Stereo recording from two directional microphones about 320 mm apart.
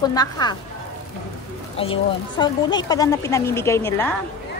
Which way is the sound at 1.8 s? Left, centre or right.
Centre.